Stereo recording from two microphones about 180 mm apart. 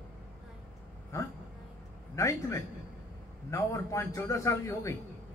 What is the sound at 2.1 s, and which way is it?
A man's voice, 15° left (ahead or behind).